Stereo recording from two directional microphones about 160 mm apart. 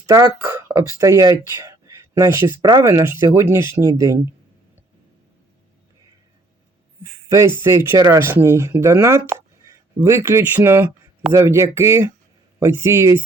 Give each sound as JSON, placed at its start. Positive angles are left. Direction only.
{"t": 0.1, "sound": "speech", "side_deg": -20}
{"t": 7.0, "sound": "speech", "side_deg": -15}